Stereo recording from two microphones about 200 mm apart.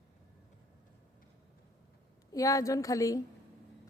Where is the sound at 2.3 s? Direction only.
15° left (ahead or behind).